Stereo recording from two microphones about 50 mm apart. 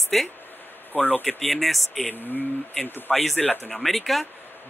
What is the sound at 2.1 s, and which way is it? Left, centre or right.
A man's voice, left.